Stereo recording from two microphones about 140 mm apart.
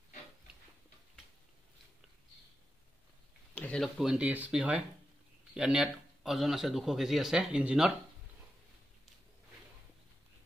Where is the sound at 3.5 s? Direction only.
10° left (ahead or behind).